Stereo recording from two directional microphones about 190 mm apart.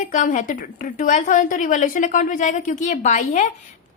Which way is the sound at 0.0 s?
40° left (ahead or behind).